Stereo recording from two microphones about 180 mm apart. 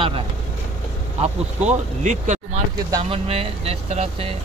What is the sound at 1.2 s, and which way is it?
Speech, 40° right (ahead or behind).